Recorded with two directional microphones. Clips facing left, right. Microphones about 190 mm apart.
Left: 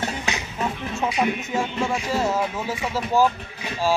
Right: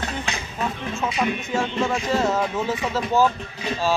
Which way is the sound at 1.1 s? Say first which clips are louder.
Even; 15° left (ahead or behind).